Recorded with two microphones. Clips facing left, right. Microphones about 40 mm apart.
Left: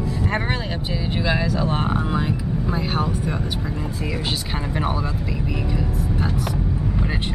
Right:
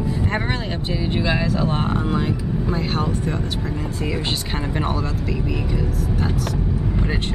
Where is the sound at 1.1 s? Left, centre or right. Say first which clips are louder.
Even; centre.